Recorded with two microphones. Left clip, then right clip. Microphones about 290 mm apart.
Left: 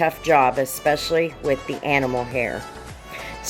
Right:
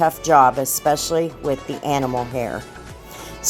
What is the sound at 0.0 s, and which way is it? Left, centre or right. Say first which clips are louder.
Speech: right 3 dB; right.